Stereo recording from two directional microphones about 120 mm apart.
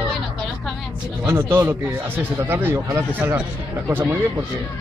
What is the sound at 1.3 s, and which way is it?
Speech, 20° right (ahead or behind).